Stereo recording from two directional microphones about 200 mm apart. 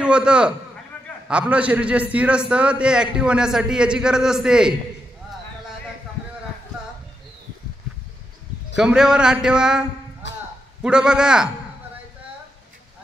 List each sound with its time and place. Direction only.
0.0 s a man's voice: 5° right (ahead or behind)
8.7 s a man's voice: 5° right (ahead or behind)
10.2 s a sound: 60° left (ahead or behind)
10.8 s a man's voice: 5° right (ahead or behind)